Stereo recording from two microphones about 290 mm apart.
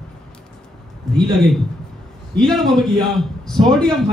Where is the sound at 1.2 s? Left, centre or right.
Centre.